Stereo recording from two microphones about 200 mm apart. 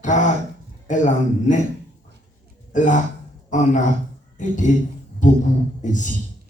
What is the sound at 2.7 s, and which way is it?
Speech, 40° left (ahead or behind).